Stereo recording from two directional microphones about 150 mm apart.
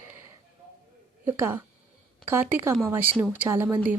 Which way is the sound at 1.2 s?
15° right (ahead or behind).